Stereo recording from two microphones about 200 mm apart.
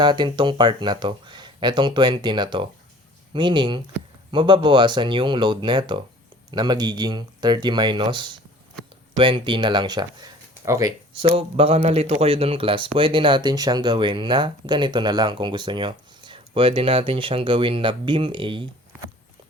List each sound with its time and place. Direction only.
0.0 s speech: 20° right (ahead or behind)
11.3 s speech: 30° right (ahead or behind)